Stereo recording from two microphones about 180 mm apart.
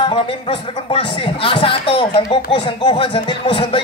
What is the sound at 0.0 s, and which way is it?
Speech, 30° left (ahead or behind).